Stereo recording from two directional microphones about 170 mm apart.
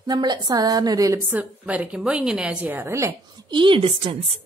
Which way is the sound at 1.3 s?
10° right (ahead or behind).